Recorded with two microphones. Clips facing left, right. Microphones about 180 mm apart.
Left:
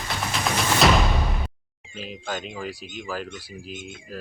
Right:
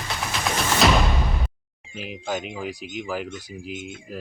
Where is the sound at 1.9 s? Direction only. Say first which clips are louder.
Right 3 dB; 15° right (ahead or behind).